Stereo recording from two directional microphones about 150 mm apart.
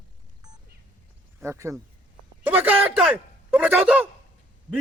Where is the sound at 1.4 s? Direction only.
20° right (ahead or behind).